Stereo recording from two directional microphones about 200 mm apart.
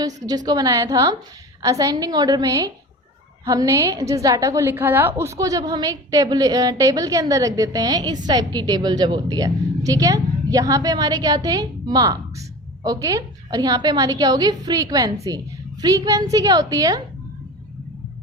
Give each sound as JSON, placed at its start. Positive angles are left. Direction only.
{"t": 0.3, "sound": "a woman's voice", "side_deg": -20}